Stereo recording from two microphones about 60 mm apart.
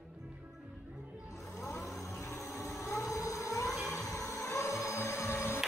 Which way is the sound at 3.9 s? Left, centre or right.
Left.